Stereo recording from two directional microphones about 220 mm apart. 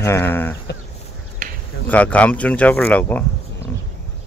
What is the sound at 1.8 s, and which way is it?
Speech, 5° left (ahead or behind).